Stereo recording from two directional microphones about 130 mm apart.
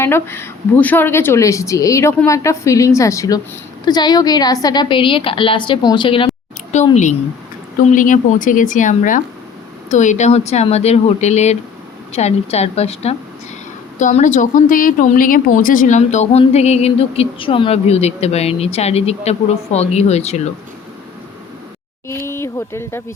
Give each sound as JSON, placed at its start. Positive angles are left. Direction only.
{"t": 0.0, "sound": "a woman's voice", "side_deg": 20}
{"t": 6.9, "sound": "speech", "side_deg": 70}
{"t": 7.9, "sound": "speech", "side_deg": 90}
{"t": 9.9, "sound": "a woman's voice", "side_deg": 65}
{"t": 14.0, "sound": "a woman's voice", "side_deg": 70}
{"t": 22.0, "sound": "a woman's voice", "side_deg": 20}